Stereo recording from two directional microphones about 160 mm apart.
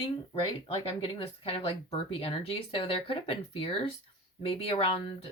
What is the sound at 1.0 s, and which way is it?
Speech, 35° left (ahead or behind).